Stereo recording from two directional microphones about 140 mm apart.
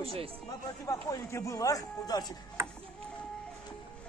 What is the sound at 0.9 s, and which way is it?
Speech, 25° left (ahead or behind).